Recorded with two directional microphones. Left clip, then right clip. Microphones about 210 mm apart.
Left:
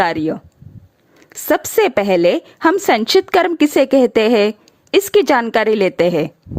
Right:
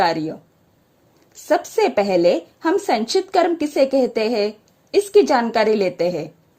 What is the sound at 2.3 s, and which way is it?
A woman's voice, 45° left (ahead or behind).